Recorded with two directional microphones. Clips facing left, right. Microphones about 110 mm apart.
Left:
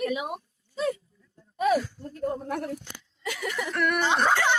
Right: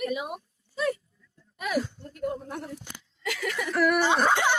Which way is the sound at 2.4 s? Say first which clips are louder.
Left 6 dB; 75° left (ahead or behind).